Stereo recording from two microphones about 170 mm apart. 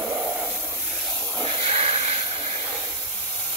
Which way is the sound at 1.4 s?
40° right (ahead or behind).